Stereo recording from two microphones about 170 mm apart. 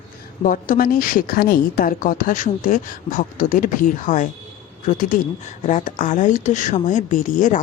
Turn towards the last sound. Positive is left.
turn(degrees=50)  # may be behind; listen again after turning